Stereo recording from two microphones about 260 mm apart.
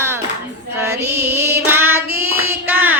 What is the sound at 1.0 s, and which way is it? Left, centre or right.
Music, right.